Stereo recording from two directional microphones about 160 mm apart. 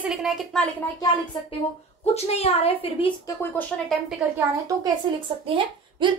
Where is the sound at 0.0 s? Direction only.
5° right (ahead or behind).